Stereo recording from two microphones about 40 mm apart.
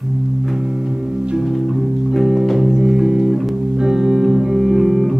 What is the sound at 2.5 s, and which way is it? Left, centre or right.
Music, centre.